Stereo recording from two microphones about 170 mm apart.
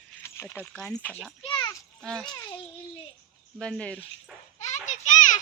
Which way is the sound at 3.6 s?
5° left (ahead or behind).